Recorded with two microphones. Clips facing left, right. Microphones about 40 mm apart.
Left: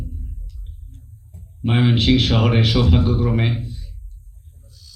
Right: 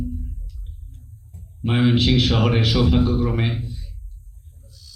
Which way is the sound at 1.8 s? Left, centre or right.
Left.